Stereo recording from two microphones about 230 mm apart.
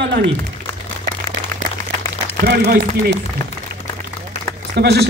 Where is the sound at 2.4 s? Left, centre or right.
Right.